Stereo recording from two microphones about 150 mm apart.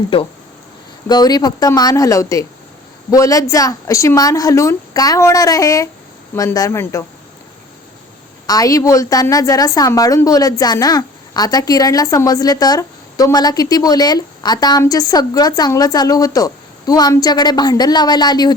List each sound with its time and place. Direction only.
0.1 s speech: 40° left (ahead or behind)
1.0 s a woman's voice: 25° left (ahead or behind)
8.4 s a woman's voice: 25° left (ahead or behind)